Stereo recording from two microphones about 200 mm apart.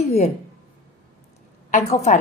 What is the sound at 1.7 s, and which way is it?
Speech, 30° left (ahead or behind).